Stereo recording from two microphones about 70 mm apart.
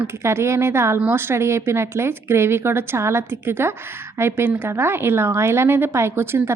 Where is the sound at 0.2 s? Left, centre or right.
Right.